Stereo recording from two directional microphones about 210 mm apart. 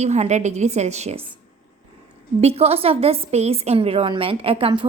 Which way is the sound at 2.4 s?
30° right (ahead or behind).